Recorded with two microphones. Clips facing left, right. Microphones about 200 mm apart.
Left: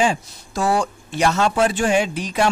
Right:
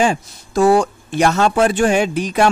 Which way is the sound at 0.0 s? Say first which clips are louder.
Right 3 dB; 55° right (ahead or behind).